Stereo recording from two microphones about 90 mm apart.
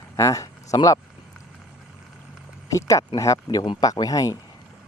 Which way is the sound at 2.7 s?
40° left (ahead or behind).